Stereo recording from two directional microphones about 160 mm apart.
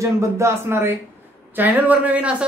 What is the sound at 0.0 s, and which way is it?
Speech, 15° right (ahead or behind).